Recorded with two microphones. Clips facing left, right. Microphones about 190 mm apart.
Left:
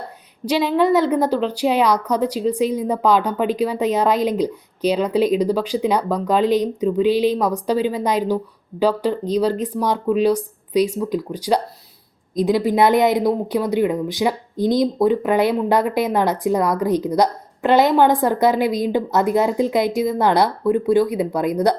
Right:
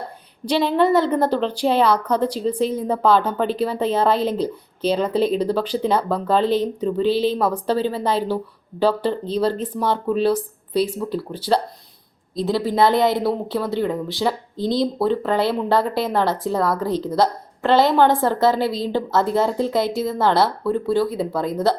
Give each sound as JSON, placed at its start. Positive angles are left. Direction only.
{"t": 0.4, "sound": "speech", "side_deg": 10}